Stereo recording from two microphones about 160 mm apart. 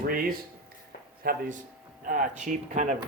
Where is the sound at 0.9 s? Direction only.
65° left (ahead or behind).